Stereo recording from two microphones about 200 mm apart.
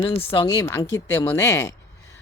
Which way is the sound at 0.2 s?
25° left (ahead or behind).